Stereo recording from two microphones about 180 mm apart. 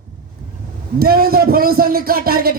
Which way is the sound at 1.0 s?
55° right (ahead or behind).